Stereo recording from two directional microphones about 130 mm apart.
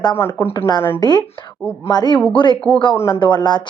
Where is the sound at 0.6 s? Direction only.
35° left (ahead or behind).